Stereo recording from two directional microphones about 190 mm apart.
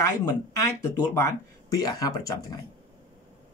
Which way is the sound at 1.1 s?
15° left (ahead or behind).